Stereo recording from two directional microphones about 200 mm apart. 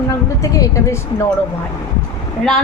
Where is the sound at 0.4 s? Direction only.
15° left (ahead or behind).